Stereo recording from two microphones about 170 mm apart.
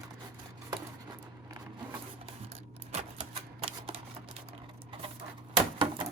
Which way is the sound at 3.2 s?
35° right (ahead or behind).